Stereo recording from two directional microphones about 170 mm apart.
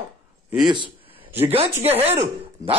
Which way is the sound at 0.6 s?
30° right (ahead or behind).